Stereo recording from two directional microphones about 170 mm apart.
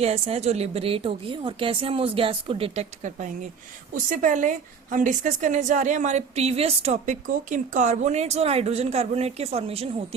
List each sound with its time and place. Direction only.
0.0 s a woman's voice: 40° right (ahead or behind)
3.9 s a woman's voice: 50° right (ahead or behind)